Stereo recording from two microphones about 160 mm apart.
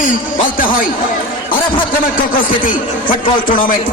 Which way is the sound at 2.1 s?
60° left (ahead or behind).